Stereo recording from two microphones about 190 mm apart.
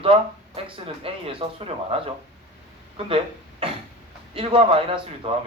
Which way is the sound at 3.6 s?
30° right (ahead or behind).